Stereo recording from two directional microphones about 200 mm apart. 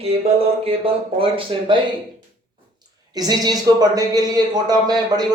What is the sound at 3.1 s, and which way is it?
A man's voice, 20° right (ahead or behind).